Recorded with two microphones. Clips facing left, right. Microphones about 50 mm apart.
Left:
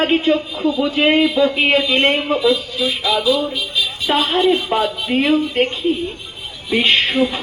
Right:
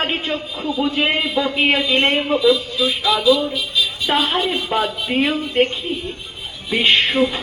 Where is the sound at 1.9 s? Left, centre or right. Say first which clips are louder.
Left 1 dB; centre.